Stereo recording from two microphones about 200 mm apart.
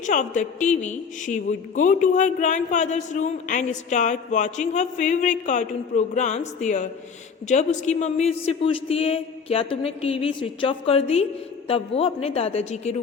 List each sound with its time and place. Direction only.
0.0 s a woman's voice: 40° left (ahead or behind)